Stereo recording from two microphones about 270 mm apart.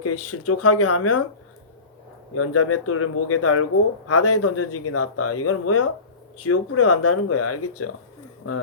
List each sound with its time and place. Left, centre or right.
0.0 s speech: left
2.3 s speech: left